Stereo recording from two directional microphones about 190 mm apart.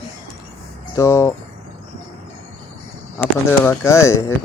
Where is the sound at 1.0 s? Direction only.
15° left (ahead or behind).